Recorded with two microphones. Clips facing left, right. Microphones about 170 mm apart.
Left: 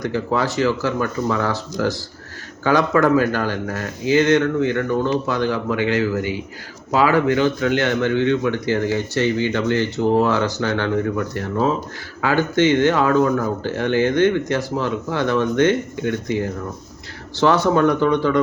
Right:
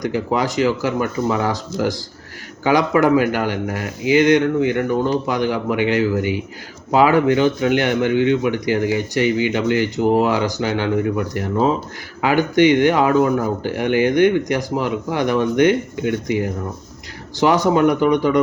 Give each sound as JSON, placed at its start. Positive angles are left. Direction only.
{"t": 0.0, "sound": "a man's voice", "side_deg": -15}